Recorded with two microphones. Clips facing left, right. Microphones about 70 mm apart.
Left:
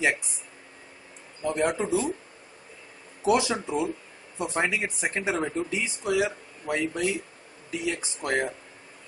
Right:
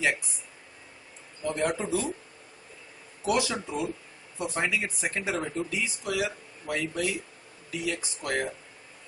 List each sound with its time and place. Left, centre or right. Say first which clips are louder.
1.4 s speech: left 3 dB; centre
3.2 s speech: left 4 dB; left